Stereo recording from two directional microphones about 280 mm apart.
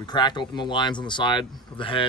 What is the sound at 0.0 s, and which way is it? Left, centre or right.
Speech, centre.